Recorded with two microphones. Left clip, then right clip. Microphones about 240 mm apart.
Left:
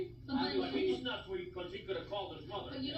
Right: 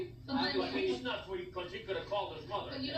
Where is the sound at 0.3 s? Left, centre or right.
Right.